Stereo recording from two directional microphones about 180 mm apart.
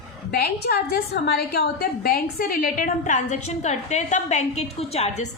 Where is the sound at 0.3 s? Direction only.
60° left (ahead or behind).